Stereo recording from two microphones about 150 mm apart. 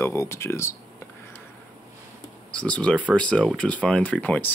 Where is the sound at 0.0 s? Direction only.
20° left (ahead or behind).